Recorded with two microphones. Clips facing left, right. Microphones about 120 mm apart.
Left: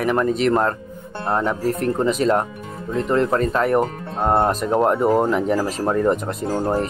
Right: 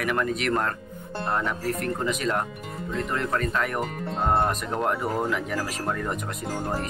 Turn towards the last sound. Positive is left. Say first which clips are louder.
# left 8 dB
turn(degrees=30)  # may be behind; listen again after turning